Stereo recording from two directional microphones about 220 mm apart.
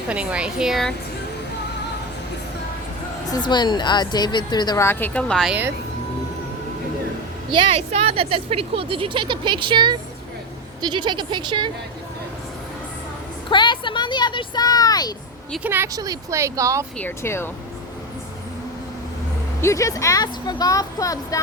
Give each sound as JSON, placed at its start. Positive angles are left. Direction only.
{"t": 0.1, "sound": "a woman's voice", "side_deg": -5}
{"t": 3.2, "sound": "speech", "side_deg": 20}
{"t": 7.5, "sound": "speech", "side_deg": -30}
{"t": 13.5, "sound": "a sound", "side_deg": 20}
{"t": 15.5, "sound": "speech", "side_deg": -10}
{"t": 17.0, "sound": "speech", "side_deg": 10}
{"t": 19.6, "sound": "speech", "side_deg": 15}